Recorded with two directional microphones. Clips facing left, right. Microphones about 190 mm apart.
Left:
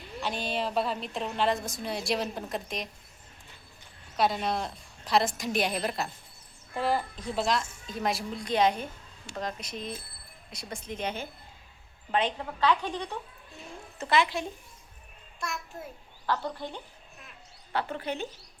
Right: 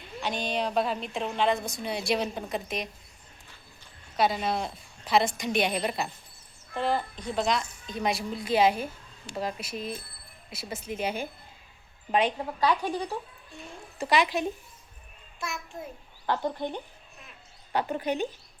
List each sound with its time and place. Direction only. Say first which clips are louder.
0.2 s a woman's voice: right 2 dB; 5° left (ahead or behind)
4.2 s a woman's voice: right 1 dB; centre (ahead or behind); by 14.5 s 15° right (ahead or behind)
15.4 s a woman's voice: even; centre (ahead or behind)
16.2 s a woman's voice: right 3 dB; 20° right (ahead or behind)